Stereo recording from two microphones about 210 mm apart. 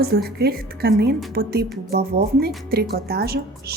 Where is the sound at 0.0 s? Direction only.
50° right (ahead or behind).